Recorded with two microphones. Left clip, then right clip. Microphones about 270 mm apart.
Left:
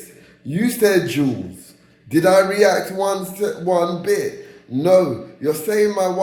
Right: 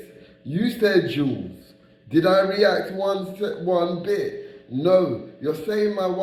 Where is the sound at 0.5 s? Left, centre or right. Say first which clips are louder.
Left 3 dB; centre.